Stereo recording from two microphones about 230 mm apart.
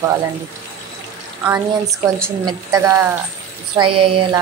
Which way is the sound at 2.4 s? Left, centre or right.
Centre.